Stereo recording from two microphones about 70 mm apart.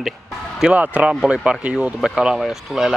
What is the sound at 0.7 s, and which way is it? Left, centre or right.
A man's voice, right.